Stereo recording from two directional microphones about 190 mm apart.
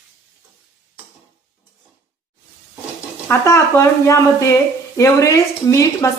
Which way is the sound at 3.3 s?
15° left (ahead or behind).